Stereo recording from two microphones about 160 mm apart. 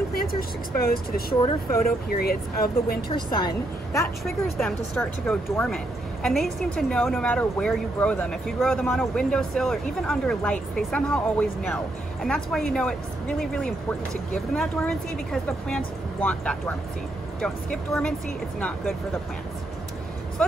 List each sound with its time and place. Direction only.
0.1 s speech: 65° left (ahead or behind)
3.2 s a woman's voice: 25° left (ahead or behind)
4.2 s a woman's voice: centre (ahead or behind)